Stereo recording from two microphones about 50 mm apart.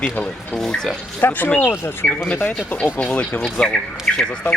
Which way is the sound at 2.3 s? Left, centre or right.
Left.